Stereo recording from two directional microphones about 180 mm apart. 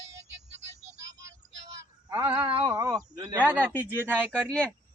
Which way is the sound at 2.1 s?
20° right (ahead or behind).